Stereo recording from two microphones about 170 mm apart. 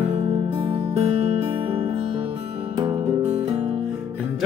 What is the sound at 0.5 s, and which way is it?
Music, 30° right (ahead or behind).